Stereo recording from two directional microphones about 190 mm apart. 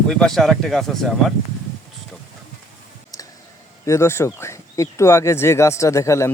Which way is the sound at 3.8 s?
15° left (ahead or behind).